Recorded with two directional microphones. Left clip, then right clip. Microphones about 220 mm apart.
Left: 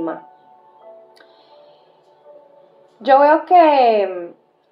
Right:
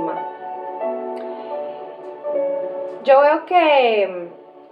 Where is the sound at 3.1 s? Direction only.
30° left (ahead or behind).